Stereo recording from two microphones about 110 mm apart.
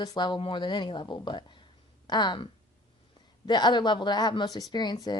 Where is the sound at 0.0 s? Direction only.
40° left (ahead or behind).